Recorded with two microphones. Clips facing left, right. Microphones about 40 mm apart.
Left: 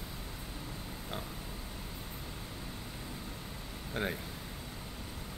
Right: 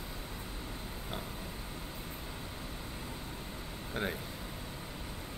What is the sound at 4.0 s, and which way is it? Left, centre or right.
Speech, centre.